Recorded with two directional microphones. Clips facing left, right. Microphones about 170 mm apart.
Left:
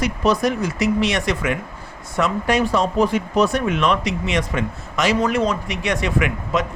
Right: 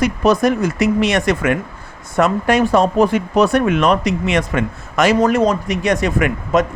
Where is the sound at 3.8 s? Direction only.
45° right (ahead or behind).